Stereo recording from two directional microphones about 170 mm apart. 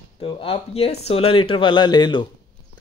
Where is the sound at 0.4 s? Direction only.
35° left (ahead or behind).